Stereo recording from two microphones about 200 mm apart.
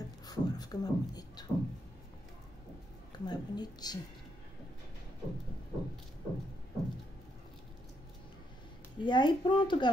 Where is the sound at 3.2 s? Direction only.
20° left (ahead or behind).